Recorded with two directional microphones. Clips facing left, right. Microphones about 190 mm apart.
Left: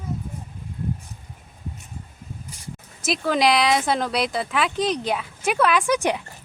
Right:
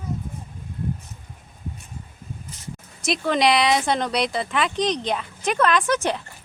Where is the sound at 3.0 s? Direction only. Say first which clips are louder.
Even; centre (ahead or behind).